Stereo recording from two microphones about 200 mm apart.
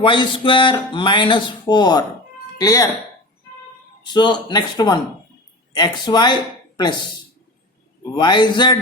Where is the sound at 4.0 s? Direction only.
20° left (ahead or behind).